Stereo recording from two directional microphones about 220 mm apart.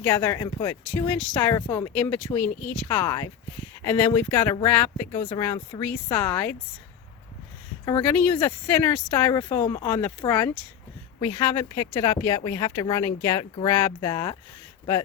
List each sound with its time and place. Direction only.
0.0 s speech: 10° left (ahead or behind)
8.0 s speech: 5° left (ahead or behind)